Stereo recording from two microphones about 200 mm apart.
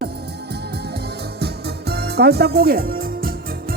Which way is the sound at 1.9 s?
55° right (ahead or behind).